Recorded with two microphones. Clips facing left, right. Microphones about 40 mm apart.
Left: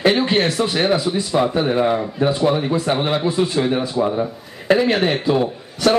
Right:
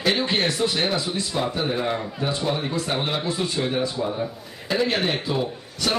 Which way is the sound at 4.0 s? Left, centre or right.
Left.